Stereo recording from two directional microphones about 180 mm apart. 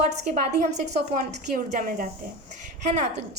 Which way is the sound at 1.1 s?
50° right (ahead or behind).